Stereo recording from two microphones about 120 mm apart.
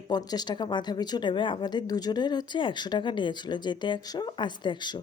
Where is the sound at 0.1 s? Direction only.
35° left (ahead or behind).